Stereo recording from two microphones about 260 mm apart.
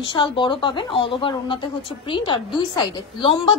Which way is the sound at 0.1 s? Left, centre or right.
Centre.